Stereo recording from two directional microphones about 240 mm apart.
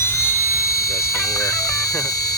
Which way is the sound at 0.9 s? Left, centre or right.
Centre.